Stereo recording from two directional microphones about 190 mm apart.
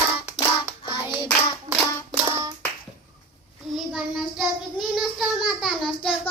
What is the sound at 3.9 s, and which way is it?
Child singing, centre (ahead or behind).